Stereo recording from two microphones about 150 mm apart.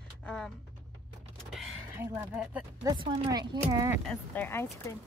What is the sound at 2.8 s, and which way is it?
Speech, 30° right (ahead or behind).